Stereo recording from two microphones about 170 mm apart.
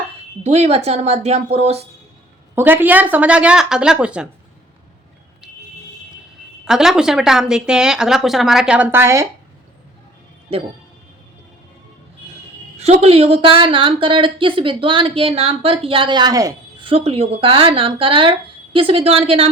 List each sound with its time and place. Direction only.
0.4 s speech: 40° right (ahead or behind)
2.6 s a woman's voice: 10° right (ahead or behind)
6.7 s a woman's voice: 5° right (ahead or behind)
12.8 s speech: 35° right (ahead or behind); by 16.8 s 20° right (ahead or behind)
16.8 s speech: 35° right (ahead or behind)